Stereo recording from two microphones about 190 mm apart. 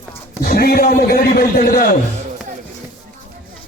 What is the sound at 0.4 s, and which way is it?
A man's voice, 50° left (ahead or behind).